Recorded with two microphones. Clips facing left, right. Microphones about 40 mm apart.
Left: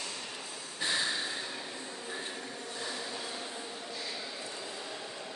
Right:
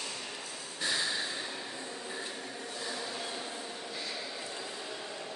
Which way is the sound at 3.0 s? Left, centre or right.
Centre.